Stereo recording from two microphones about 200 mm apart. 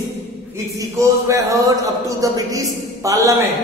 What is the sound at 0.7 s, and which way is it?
A man's voice, 15° right (ahead or behind).